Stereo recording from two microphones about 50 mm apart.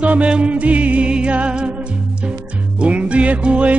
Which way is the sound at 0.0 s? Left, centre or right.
Right.